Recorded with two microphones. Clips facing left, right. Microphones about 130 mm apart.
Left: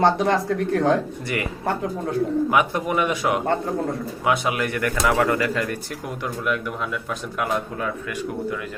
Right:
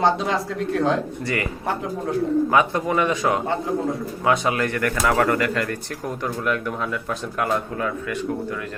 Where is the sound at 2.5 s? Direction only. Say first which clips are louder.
Right 1 dB; 15° left (ahead or behind).